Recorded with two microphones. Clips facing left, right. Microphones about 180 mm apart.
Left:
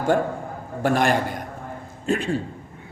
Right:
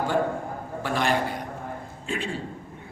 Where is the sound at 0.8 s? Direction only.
50° left (ahead or behind).